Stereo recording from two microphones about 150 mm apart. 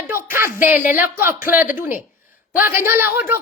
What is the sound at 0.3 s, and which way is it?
A woman's voice, 15° right (ahead or behind).